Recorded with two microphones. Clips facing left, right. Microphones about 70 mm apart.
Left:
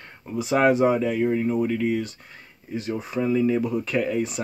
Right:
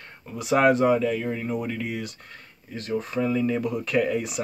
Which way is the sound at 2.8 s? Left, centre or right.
Centre.